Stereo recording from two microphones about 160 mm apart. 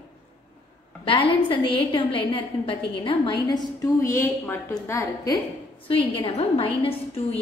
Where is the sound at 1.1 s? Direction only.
35° left (ahead or behind).